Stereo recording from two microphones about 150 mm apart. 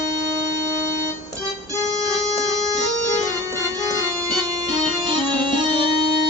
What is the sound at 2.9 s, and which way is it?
Music, 20° right (ahead or behind).